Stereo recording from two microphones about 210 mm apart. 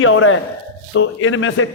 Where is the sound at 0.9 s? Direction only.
70° left (ahead or behind).